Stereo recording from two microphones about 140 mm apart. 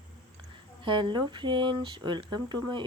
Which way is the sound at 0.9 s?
35° right (ahead or behind).